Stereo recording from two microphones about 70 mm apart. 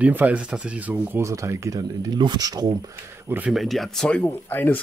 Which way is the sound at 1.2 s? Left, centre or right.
Right.